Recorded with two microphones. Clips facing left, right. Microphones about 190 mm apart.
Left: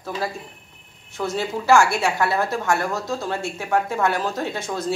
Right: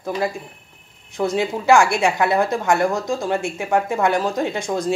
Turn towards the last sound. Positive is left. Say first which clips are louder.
# right 4 dB
turn(degrees=-15)  # may be behind; listen again after turning